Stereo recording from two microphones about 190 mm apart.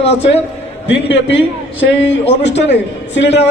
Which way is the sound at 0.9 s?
70° left (ahead or behind).